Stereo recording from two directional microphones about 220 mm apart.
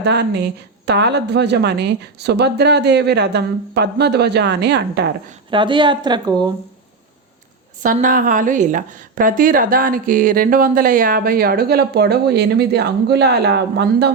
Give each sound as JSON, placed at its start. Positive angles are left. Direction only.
{"t": 0.0, "sound": "speech", "side_deg": -50}
{"t": 5.5, "sound": "speech", "side_deg": -20}
{"t": 7.8, "sound": "a woman's voice", "side_deg": -40}